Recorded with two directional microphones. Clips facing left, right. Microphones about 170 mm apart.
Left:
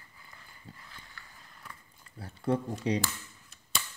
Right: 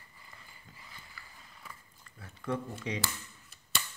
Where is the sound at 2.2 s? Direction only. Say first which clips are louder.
Left 6 dB; 35° left (ahead or behind).